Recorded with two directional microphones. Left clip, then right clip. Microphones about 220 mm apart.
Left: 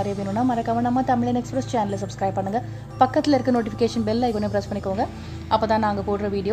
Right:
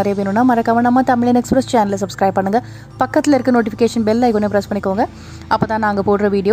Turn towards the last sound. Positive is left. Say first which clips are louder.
# right 10 dB
turn(degrees=-25)  # may be behind; listen again after turning